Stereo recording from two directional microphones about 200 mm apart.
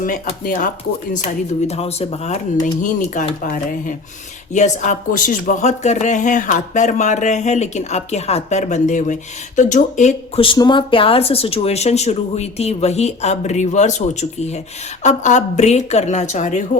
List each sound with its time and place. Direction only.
0.0 s speech: 40° left (ahead or behind)